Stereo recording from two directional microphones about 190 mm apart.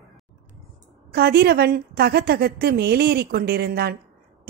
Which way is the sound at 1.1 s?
55° right (ahead or behind).